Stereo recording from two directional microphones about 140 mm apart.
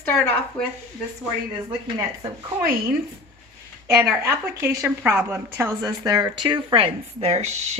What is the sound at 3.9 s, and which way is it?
A woman's voice, 20° right (ahead or behind).